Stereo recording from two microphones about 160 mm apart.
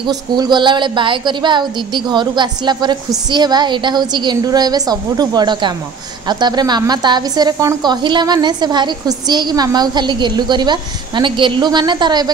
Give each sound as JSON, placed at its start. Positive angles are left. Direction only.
{"t": 0.0, "sound": "a woman's voice", "side_deg": -25}